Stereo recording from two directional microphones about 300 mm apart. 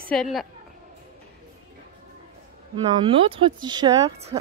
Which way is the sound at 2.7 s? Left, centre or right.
Centre.